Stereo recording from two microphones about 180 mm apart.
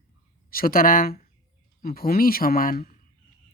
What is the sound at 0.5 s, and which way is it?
Speech, 55° left (ahead or behind).